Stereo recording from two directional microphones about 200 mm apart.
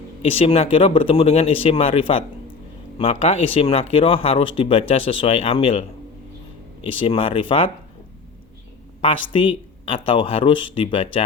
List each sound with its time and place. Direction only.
0.2 s speech: 30° left (ahead or behind)
6.8 s speech: 25° left (ahead or behind)
9.0 s speech: 25° left (ahead or behind)